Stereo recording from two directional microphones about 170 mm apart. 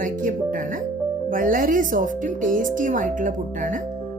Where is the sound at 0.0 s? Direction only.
50° right (ahead or behind).